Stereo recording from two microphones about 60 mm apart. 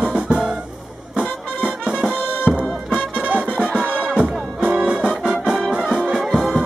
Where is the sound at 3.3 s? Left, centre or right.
Right.